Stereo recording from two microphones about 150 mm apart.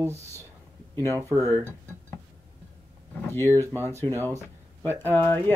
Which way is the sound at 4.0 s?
15° left (ahead or behind).